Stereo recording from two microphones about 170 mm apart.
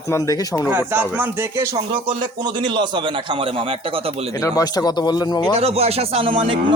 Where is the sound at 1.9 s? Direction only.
30° right (ahead or behind).